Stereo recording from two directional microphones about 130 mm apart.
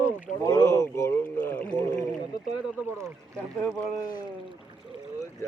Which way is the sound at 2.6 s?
20° right (ahead or behind).